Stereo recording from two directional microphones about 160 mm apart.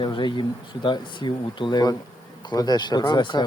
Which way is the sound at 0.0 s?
30° left (ahead or behind).